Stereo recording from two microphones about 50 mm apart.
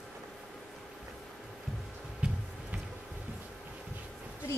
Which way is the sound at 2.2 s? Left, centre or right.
Centre.